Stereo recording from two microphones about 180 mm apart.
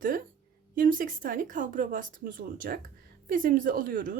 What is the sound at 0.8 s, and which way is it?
Speech, 50° right (ahead or behind).